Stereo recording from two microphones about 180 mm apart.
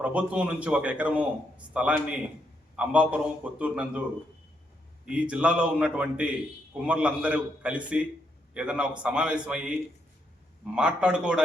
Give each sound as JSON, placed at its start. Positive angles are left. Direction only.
{"t": 0.0, "sound": "a man's voice", "side_deg": -5}
{"t": 5.0, "sound": "a man's voice", "side_deg": -5}
{"t": 10.8, "sound": "a man's voice", "side_deg": -5}